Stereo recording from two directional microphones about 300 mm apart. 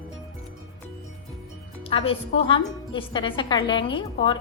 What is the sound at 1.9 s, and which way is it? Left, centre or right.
A woman's voice, centre.